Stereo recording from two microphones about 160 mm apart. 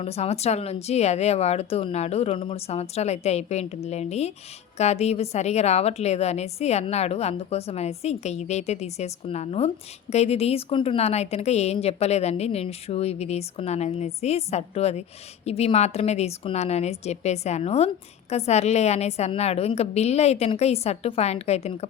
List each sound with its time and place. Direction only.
0.0 s a woman's voice: 40° left (ahead or behind)